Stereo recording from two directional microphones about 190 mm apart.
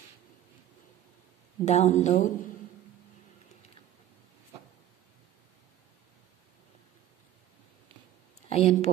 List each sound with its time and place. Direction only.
1.6 s speech: 35° left (ahead or behind)
8.5 s speech: 35° left (ahead or behind)